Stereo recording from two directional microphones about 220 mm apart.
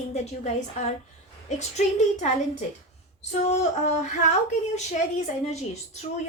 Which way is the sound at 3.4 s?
30° left (ahead or behind).